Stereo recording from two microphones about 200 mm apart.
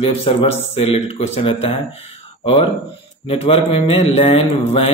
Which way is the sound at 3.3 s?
30° left (ahead or behind).